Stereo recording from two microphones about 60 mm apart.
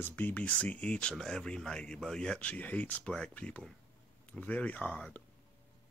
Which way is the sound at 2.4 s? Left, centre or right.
Left.